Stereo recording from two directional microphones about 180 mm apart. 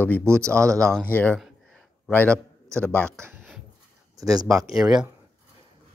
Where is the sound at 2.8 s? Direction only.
10° left (ahead or behind).